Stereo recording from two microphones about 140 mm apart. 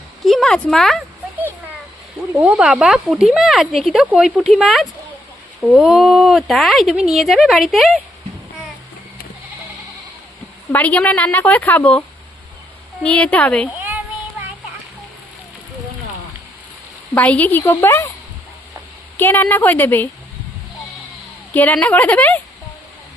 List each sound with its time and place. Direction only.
0.3 s speech: 5° left (ahead or behind)
2.4 s speech: 5° right (ahead or behind)
10.7 s a woman's voice: 10° left (ahead or behind)
17.2 s a woman's voice: 10° left (ahead or behind)
19.1 s a woman's voice: 15° left (ahead or behind)
21.5 s a woman's voice: 10° left (ahead or behind)